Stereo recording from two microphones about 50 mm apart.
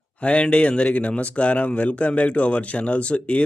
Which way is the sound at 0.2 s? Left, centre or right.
Left.